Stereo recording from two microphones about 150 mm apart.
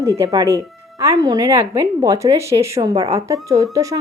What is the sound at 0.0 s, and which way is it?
Speech, 20° right (ahead or behind).